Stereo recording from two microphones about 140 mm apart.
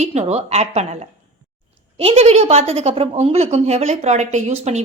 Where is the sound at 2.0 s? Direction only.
45° right (ahead or behind).